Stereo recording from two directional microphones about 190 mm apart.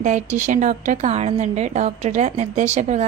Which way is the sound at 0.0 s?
40° right (ahead or behind).